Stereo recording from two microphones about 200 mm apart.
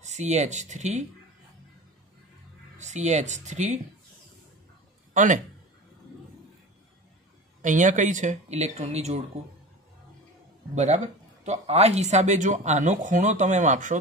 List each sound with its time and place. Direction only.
0.0 s speech: 35° right (ahead or behind)
2.8 s speech: 35° right (ahead or behind)
5.1 s a man's voice: 40° right (ahead or behind)
7.6 s speech: 40° right (ahead or behind)
10.7 s speech: 35° right (ahead or behind)